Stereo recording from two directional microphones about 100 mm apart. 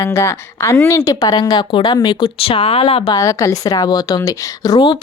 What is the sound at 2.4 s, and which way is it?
Speech, 70° left (ahead or behind).